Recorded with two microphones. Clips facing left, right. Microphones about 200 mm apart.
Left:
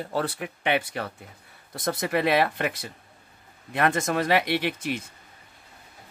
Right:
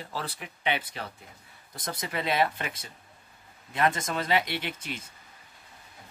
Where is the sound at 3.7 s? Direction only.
60° left (ahead or behind).